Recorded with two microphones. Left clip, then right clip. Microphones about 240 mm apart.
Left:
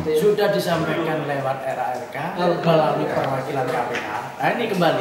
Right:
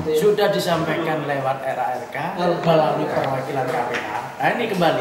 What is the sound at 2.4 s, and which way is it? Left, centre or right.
Speech, left.